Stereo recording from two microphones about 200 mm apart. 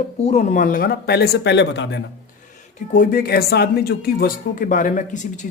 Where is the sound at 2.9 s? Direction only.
45° left (ahead or behind).